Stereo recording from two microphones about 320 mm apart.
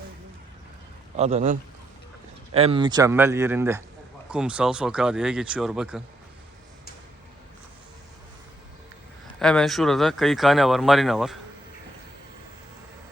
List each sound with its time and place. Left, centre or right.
1.1 s a man's voice: centre
9.4 s speech: centre